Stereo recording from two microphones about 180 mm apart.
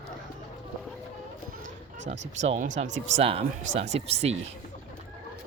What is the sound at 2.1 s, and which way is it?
Speech, 40° right (ahead or behind).